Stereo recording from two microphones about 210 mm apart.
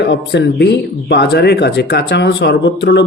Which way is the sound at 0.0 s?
55° left (ahead or behind).